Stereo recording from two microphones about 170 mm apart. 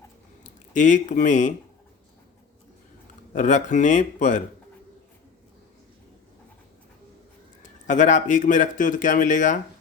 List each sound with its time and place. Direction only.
0.4 s speech: 45° left (ahead or behind)
3.3 s a man's voice: 45° left (ahead or behind)
7.6 s a man's voice: 45° left (ahead or behind)